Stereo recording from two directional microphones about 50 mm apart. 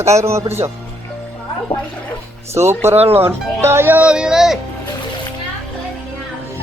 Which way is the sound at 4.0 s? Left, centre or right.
Centre.